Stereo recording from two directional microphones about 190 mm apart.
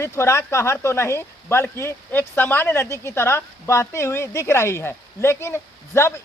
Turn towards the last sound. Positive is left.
turn(degrees=15)  # may be behind; listen again after turning